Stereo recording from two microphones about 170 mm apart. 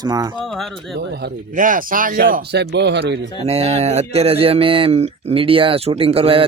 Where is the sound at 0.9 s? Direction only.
70° right (ahead or behind).